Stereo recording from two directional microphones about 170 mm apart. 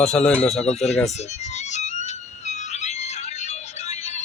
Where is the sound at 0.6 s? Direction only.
40° left (ahead or behind).